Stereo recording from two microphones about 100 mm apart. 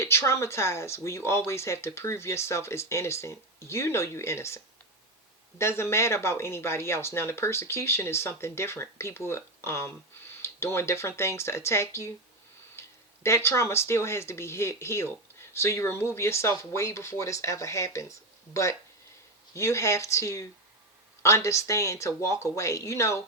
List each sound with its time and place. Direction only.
0.0 s speech: 25° left (ahead or behind)
13.2 s speech: 30° left (ahead or behind)